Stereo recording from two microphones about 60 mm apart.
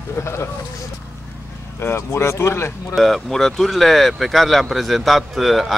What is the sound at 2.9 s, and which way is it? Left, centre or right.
Speech, centre.